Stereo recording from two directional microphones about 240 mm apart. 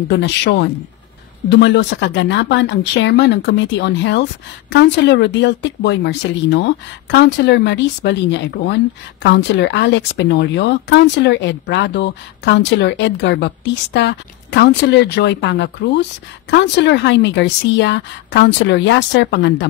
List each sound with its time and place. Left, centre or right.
0.1 s speech: left